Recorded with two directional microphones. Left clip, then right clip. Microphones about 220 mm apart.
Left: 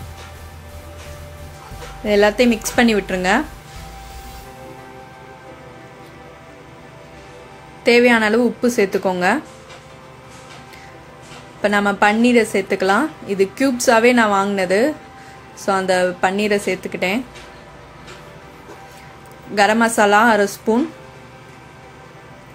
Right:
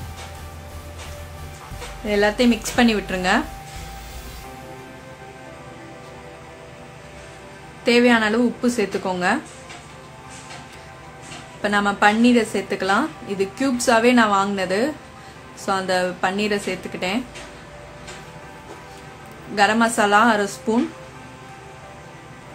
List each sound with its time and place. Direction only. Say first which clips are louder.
2.0 s a woman's voice: left 4 dB; 20° left (ahead or behind)
7.8 s a woman's voice: left 4 dB; 20° left (ahead or behind)
11.6 s a woman's voice: left 2 dB; 20° left (ahead or behind)
19.5 s a woman's voice: left 3 dB; 20° left (ahead or behind)